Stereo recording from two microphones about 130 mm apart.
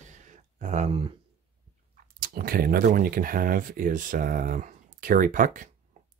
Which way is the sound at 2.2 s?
90° right.